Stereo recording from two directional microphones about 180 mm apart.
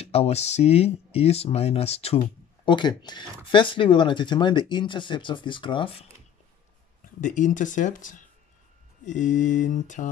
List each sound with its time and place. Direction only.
0.0 s speech: 35° left (ahead or behind)
7.2 s speech: 45° left (ahead or behind)